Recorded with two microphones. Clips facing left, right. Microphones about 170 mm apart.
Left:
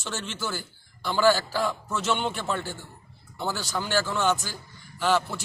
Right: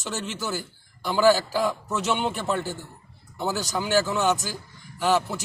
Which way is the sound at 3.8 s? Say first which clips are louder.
Right 3 dB; 5° right (ahead or behind).